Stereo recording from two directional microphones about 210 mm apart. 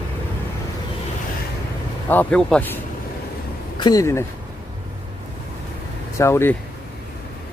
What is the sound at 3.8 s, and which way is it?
Speech, 15° left (ahead or behind).